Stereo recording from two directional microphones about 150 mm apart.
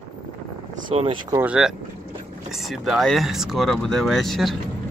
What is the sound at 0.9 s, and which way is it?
Speech, 40° right (ahead or behind).